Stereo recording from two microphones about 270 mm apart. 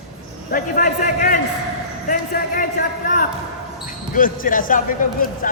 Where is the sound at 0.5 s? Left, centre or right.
Left.